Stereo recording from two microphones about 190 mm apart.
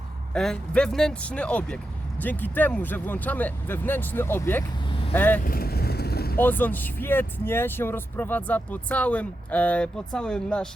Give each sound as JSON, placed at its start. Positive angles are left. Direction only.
{"t": 0.3, "sound": "speech", "side_deg": 5}
{"t": 5.4, "sound": "vehicle", "side_deg": 50}
{"t": 6.4, "sound": "speech", "side_deg": 10}